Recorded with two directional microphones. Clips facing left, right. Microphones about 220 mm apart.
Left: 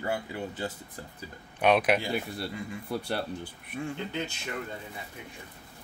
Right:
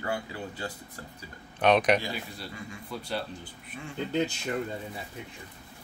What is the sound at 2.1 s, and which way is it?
Speech, 60° left (ahead or behind).